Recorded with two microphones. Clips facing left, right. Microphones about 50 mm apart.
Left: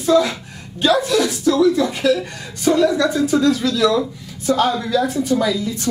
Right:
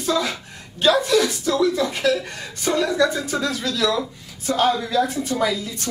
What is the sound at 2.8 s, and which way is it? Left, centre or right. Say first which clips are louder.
Speech: left 4 dB; centre.